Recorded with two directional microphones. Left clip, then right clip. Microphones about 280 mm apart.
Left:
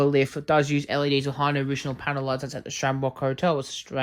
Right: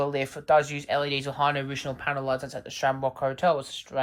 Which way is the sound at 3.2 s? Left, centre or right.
Centre.